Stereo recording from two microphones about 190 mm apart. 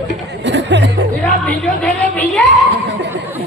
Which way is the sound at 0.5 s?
70° right (ahead or behind).